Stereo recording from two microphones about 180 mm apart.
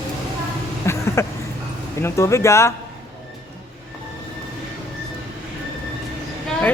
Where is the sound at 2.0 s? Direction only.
15° left (ahead or behind).